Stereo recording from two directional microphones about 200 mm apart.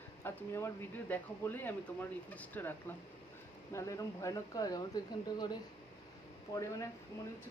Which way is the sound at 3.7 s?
15° left (ahead or behind).